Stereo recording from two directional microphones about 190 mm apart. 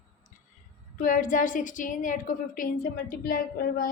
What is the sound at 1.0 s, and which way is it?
A woman's voice, 45° left (ahead or behind).